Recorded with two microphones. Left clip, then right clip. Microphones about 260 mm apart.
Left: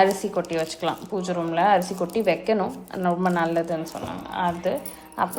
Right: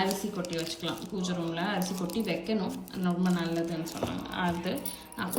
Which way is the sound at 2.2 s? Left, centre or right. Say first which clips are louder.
Left 12 dB; centre.